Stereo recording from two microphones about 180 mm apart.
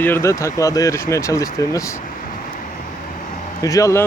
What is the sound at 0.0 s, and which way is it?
Speech, 15° left (ahead or behind).